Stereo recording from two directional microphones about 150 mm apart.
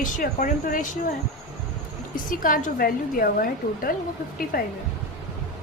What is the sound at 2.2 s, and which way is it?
A woman's voice, 65° left (ahead or behind).